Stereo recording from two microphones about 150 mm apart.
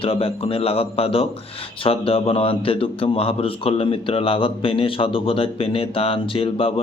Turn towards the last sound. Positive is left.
turn(degrees=40)  # may be behind; listen again after turning